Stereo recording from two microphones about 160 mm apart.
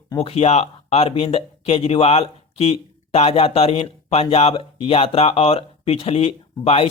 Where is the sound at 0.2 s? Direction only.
40° left (ahead or behind).